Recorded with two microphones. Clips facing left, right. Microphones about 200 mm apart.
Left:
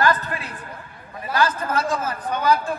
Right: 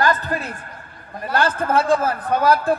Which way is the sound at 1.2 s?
55° right (ahead or behind).